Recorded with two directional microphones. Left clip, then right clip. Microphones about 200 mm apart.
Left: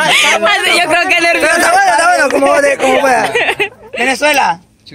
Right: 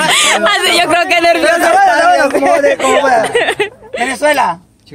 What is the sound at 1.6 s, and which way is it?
Speech, 60° left (ahead or behind).